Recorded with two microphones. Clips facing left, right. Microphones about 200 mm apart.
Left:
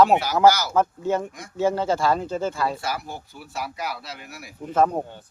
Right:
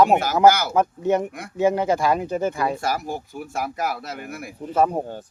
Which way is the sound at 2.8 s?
45° right (ahead or behind).